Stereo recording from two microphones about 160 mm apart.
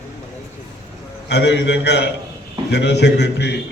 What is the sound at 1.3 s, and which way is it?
A man's voice, 90° left.